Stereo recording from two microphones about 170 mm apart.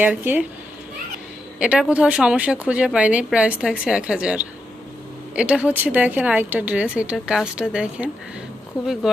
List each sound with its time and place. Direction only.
0.0 s speech: 10° right (ahead or behind)
1.5 s speech: 5° right (ahead or behind)